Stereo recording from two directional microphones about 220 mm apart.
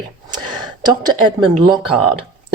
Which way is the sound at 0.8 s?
20° right (ahead or behind).